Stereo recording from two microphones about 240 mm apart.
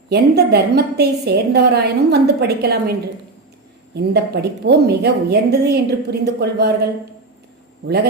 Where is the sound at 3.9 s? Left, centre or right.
Right.